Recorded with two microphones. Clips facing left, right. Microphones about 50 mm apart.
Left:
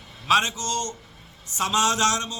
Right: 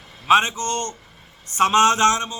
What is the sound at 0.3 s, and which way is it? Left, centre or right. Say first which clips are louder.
A man's voice: right 4 dB; right.